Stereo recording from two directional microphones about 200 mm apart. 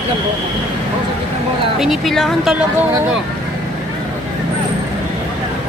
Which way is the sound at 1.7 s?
Centre (ahead or behind).